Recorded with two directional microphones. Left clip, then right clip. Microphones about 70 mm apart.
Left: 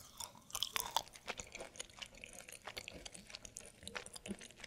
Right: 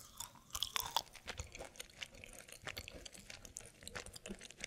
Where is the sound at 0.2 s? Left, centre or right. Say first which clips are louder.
Left 1 dB; centre.